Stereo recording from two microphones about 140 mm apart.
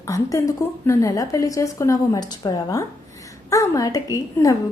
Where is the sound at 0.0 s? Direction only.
25° left (ahead or behind).